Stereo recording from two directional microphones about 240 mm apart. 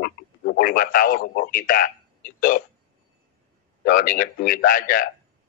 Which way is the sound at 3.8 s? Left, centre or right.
Left.